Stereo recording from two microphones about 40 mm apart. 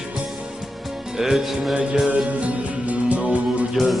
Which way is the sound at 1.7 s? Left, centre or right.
Right.